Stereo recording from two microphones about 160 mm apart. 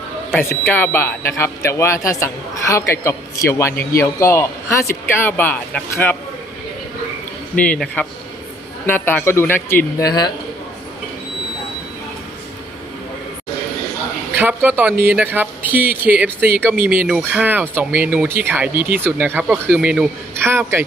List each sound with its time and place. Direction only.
0.3 s speech: 15° left (ahead or behind)
7.5 s speech: 10° left (ahead or behind); by 10.3 s 25° left (ahead or behind)
14.3 s a woman's voice: 10° right (ahead or behind)